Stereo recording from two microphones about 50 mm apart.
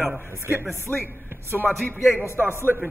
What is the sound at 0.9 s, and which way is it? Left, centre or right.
Speech, left.